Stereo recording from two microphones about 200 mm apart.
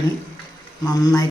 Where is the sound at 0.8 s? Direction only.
15° left (ahead or behind).